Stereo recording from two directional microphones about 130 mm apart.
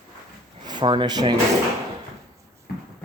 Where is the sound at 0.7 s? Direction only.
35° right (ahead or behind).